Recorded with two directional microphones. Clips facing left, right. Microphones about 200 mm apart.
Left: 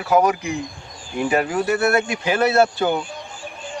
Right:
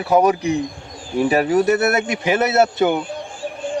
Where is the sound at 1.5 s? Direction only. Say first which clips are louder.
Right 3 dB; 20° right (ahead or behind).